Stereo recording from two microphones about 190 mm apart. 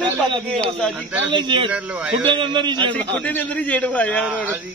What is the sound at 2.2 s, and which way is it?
Speech, 25° right (ahead or behind).